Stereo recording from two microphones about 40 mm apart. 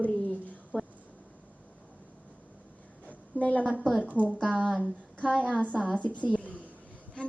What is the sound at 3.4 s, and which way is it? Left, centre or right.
Speech, left.